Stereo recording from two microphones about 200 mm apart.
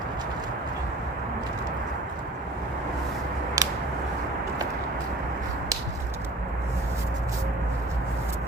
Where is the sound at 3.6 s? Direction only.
15° right (ahead or behind).